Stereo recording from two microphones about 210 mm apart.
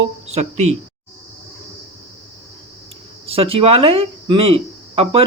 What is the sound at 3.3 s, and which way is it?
Speech, 25° right (ahead or behind).